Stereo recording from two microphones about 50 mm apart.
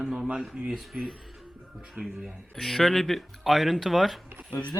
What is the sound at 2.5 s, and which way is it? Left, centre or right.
Speech, centre.